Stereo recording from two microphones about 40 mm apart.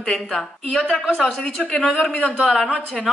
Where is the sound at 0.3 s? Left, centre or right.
Centre.